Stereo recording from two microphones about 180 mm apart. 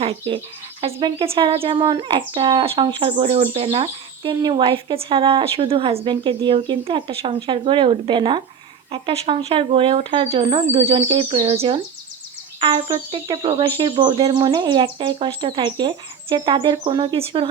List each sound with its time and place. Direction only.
0.0 s speech: 35° right (ahead or behind)